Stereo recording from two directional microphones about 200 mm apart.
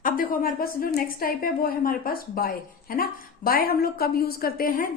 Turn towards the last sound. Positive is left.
turn(degrees=45)  # may be behind; listen again after turning